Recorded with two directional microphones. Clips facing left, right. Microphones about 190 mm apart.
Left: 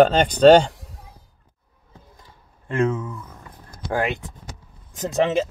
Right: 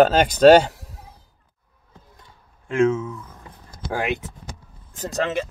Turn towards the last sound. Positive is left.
turn(degrees=20)  # may be behind; listen again after turning